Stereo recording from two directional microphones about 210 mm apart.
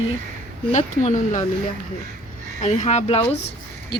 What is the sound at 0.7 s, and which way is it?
Speech, 35° left (ahead or behind).